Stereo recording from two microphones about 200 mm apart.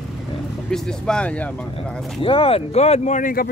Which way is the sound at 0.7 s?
5° left (ahead or behind).